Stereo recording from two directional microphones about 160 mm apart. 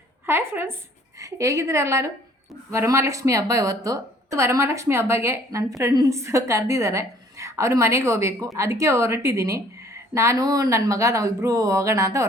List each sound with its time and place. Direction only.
0.3 s a woman's voice: 15° right (ahead or behind)